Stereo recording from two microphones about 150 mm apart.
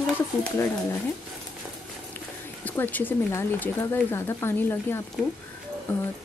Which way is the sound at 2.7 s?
10° left (ahead or behind).